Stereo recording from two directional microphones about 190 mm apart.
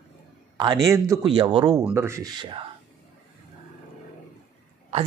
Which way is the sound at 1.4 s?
25° right (ahead or behind).